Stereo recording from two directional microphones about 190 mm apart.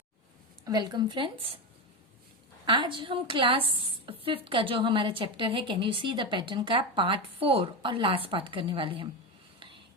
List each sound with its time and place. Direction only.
0.6 s a woman's voice: 20° right (ahead or behind)
2.6 s a woman's voice: 25° right (ahead or behind)
9.6 s a sound: 25° right (ahead or behind)